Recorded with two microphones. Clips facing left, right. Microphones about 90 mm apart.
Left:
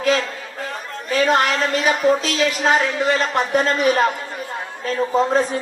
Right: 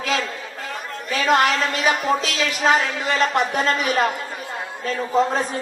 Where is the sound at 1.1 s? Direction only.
40° left (ahead or behind).